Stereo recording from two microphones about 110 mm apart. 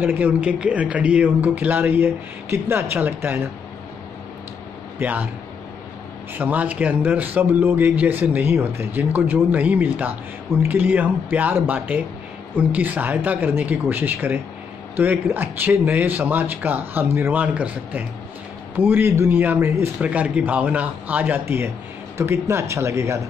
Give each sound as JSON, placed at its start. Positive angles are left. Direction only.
{"t": 0.0, "sound": "speech", "side_deg": -15}
{"t": 4.9, "sound": "a man's voice", "side_deg": -15}
{"t": 6.3, "sound": "speech", "side_deg": -15}